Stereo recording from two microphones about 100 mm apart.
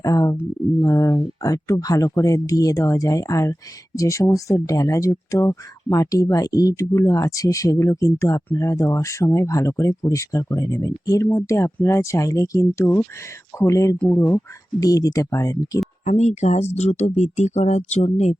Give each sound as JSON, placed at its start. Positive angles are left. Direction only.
{"t": 0.0, "sound": "speech", "side_deg": 35}
{"t": 16.6, "sound": "speech", "side_deg": 90}